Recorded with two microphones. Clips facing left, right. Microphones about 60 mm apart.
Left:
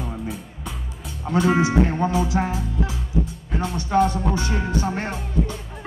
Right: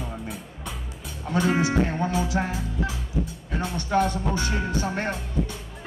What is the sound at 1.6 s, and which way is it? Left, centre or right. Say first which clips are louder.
Music: left 4 dB; left.